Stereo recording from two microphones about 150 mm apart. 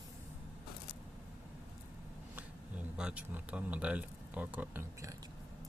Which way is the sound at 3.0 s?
5° right (ahead or behind).